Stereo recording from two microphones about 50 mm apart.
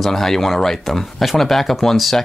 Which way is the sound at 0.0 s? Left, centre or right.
Centre.